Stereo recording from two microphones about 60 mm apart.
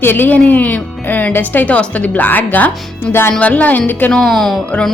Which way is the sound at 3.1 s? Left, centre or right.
Left.